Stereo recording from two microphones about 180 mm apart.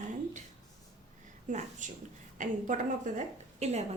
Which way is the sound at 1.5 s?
45° right (ahead or behind).